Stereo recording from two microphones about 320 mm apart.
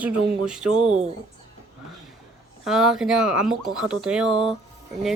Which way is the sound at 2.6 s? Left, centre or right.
Centre.